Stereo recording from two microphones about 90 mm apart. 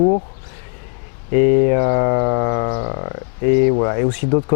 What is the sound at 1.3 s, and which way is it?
Speech, 15° left (ahead or behind).